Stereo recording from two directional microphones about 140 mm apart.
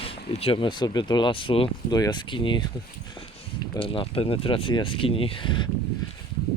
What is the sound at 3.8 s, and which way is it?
Speech, 40° left (ahead or behind).